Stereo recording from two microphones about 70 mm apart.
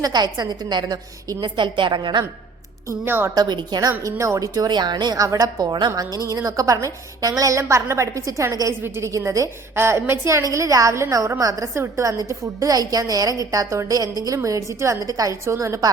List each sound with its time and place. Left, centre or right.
0.0 s a woman's voice: right
2.9 s a woman's voice: right
3.3 s a woman's voice: right
4.0 s a woman's voice: right
4.7 s a woman's voice: right
5.2 s a woman's voice: right
6.4 s a woman's voice: right
7.7 s a woman's voice: right
9.7 s a woman's voice: right
11.7 s a woman's voice: right
14.3 s a woman's voice: right